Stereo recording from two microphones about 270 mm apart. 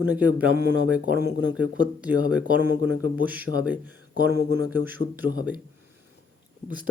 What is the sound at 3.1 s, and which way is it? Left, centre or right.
Speech, centre.